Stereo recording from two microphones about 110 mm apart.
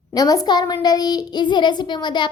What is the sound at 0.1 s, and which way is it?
A woman's voice, 35° left (ahead or behind).